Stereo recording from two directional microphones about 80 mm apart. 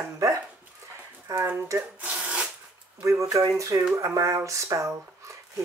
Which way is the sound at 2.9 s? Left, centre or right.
Right.